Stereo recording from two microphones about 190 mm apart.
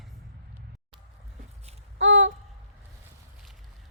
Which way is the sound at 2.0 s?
75° right (ahead or behind).